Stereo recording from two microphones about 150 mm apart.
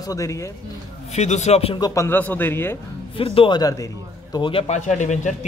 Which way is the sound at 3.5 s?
25° left (ahead or behind).